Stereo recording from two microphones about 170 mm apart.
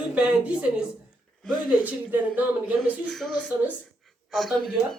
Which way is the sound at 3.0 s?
5° left (ahead or behind).